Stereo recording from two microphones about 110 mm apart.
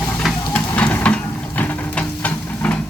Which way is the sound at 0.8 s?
15° left (ahead or behind).